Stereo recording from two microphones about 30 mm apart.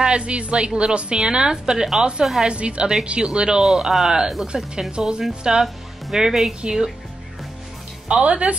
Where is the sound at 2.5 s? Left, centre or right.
Right.